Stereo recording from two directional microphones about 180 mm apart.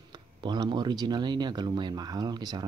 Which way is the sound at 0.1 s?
25° right (ahead or behind).